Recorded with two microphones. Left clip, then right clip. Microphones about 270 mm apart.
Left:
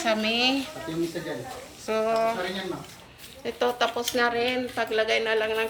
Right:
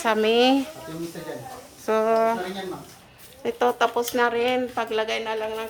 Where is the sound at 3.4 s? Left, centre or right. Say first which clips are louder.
Right 4 dB; centre.